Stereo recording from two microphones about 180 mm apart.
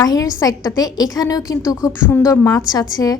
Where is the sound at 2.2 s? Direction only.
15° left (ahead or behind).